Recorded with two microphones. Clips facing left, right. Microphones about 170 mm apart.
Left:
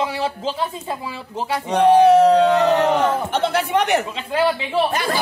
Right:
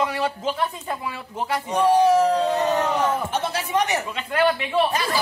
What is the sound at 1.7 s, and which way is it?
Speech, 65° left (ahead or behind).